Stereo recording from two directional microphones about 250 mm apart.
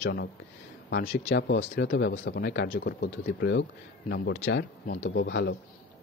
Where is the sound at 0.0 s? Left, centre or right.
Left.